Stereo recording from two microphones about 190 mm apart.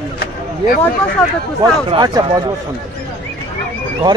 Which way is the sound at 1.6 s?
20° right (ahead or behind).